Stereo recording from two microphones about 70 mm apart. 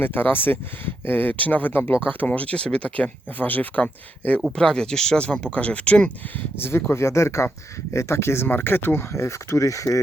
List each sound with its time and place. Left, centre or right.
0.0 s speech: left
4.5 s speech: centre
6.6 s speech: left